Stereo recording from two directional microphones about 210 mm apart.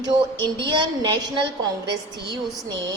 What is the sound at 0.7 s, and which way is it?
A woman's voice, 20° right (ahead or behind).